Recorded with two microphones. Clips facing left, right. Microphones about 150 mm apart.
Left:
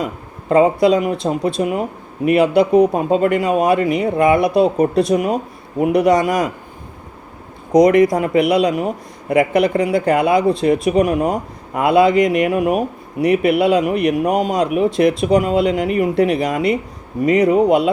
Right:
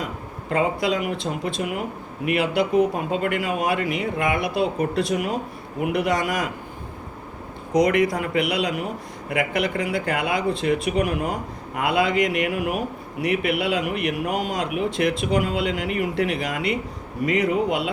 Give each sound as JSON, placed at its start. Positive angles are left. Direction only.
{"t": 0.5, "sound": "speech", "side_deg": 35}
{"t": 7.8, "sound": "speech", "side_deg": 40}